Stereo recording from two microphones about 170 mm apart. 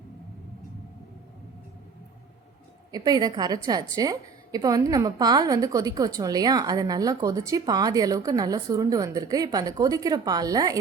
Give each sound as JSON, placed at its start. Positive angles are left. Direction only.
{"t": 2.9, "sound": "a woman's voice", "side_deg": -20}